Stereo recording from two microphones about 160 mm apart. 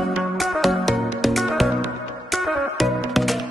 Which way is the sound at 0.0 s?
Centre (ahead or behind).